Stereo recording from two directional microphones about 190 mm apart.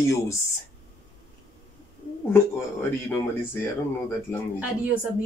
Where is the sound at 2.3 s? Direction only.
10° left (ahead or behind).